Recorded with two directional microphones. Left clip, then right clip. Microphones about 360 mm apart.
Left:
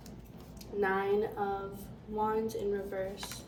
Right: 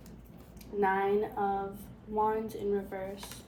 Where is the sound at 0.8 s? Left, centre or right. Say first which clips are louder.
Right 2 dB; centre.